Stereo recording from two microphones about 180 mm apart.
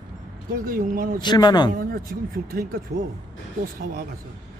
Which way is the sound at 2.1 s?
60° right (ahead or behind).